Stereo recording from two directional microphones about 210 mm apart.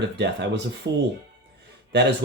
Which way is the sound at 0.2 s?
55° right (ahead or behind).